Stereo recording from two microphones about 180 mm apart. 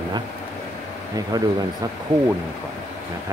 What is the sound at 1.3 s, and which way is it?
Speech, 20° right (ahead or behind).